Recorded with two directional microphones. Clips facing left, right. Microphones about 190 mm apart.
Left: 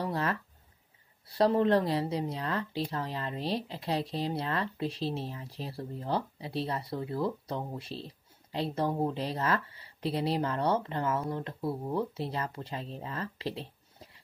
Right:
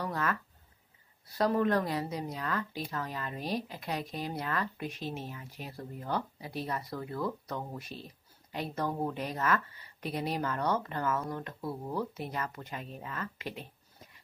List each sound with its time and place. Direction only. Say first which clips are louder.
0.0 s speech: left 2 dB; 30° left (ahead or behind)